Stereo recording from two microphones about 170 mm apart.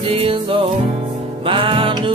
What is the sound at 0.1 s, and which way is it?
Music, 35° right (ahead or behind).